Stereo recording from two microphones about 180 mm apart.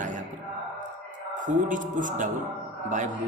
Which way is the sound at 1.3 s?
45° right (ahead or behind).